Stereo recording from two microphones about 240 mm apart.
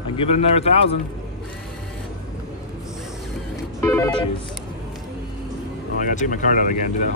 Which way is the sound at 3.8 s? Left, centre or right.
Centre.